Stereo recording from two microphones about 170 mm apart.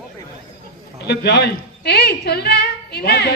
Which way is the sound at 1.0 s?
75° left (ahead or behind).